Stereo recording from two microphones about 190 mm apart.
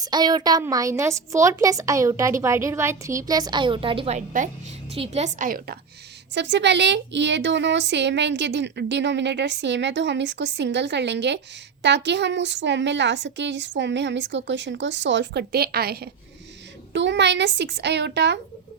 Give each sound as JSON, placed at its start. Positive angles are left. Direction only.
{"t": 0.0, "sound": "a woman's voice", "side_deg": -20}
{"t": 6.3, "sound": "a woman's voice", "side_deg": -70}
{"t": 16.9, "sound": "a child's voice", "side_deg": -70}